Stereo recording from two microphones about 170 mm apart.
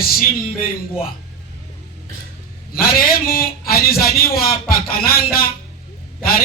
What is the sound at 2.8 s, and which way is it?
A man's voice, 60° left (ahead or behind).